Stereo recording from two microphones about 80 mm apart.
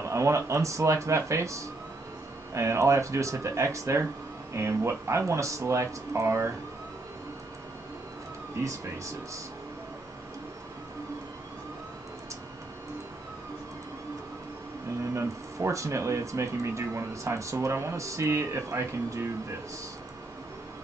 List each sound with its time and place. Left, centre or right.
0.0 s a sound: right
0.5 s speech: right
8.6 s speech: right
15.1 s speech: right